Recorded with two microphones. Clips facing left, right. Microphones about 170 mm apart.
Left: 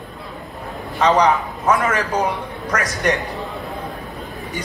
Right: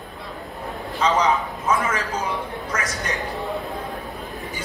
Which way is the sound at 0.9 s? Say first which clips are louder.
Left 4 dB; 70° left (ahead or behind).